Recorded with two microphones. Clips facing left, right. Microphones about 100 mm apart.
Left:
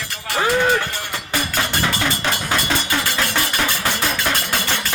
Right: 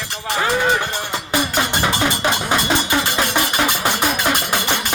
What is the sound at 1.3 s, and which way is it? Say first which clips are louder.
Music: right 3 dB; 20° right (ahead or behind).